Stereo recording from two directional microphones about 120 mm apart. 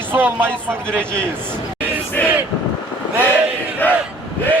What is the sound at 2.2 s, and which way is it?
Speech, 15° left (ahead or behind).